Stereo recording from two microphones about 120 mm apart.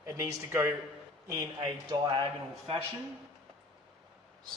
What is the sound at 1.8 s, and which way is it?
Speech, 40° right (ahead or behind).